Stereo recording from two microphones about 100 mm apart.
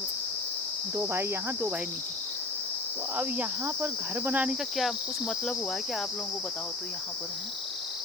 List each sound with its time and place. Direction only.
0.9 s cricket: 25° right (ahead or behind)
3.2 s cricket: 15° right (ahead or behind)
4.8 s cricket: centre (ahead or behind)